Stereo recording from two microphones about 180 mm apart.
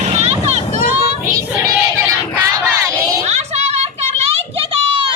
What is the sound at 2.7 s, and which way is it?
Crowd, 15° right (ahead or behind).